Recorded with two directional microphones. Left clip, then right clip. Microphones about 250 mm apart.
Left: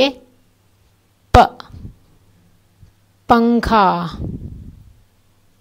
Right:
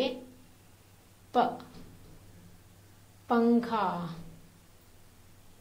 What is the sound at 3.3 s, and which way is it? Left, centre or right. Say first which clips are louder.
Speech: left 13 dB; left.